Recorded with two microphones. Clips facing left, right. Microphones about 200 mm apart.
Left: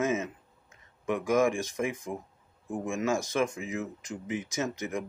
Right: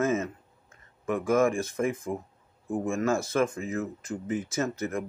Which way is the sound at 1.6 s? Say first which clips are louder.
Right 3 dB; 10° left (ahead or behind).